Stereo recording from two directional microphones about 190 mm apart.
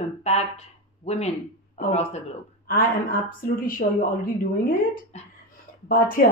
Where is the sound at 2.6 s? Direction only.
50° left (ahead or behind).